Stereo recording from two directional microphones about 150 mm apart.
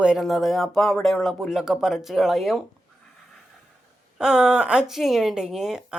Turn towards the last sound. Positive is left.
turn(degrees=-5)  # may be behind; listen again after turning